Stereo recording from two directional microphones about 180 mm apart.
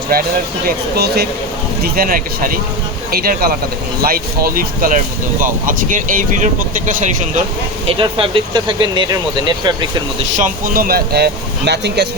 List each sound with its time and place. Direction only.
0.1 s speech: 60° right (ahead or behind)
7.9 s speech: 30° right (ahead or behind)
10.3 s speech: 50° right (ahead or behind); by 12.0 s 70° right (ahead or behind)